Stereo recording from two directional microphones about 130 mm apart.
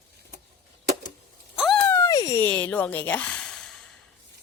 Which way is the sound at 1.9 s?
20° left (ahead or behind).